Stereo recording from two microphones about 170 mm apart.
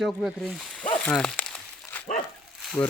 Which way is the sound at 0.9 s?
5° left (ahead or behind).